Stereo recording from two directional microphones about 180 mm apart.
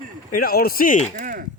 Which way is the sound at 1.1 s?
50° right (ahead or behind).